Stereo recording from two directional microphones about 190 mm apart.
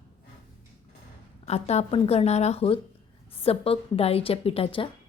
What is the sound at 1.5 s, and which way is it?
A woman's voice, 35° left (ahead or behind).